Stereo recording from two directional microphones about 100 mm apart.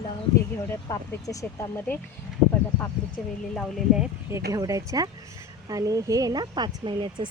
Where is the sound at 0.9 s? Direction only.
35° left (ahead or behind).